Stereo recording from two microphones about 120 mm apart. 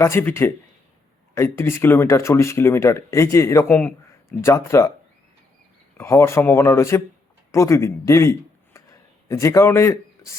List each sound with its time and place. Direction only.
0.0 s speech: 20° left (ahead or behind)
6.0 s speech: 20° left (ahead or behind)